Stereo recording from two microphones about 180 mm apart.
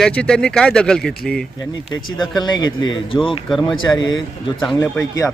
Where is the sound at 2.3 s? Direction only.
25° left (ahead or behind).